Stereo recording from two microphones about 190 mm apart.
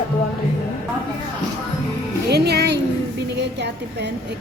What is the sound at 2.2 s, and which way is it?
Music, 60° right (ahead or behind).